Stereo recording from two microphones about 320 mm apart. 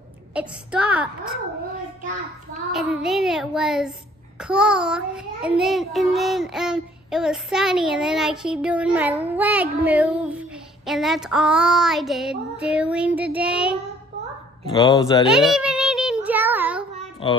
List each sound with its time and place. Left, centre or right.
0.3 s child singing: centre
2.7 s child singing: centre
14.7 s speech: centre
15.2 s a sound: centre
17.2 s speech: centre